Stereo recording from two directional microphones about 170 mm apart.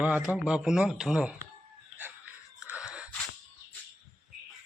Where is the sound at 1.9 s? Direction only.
10° right (ahead or behind).